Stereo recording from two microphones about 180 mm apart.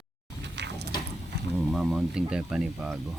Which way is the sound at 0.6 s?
70° right (ahead or behind).